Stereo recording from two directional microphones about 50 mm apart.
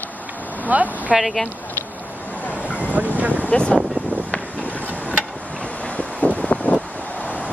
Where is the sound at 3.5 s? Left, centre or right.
Left.